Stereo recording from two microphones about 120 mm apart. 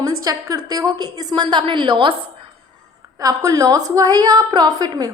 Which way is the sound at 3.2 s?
30° right (ahead or behind).